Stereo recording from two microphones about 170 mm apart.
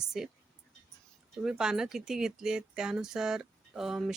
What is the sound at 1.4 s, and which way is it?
Speech, 5° right (ahead or behind).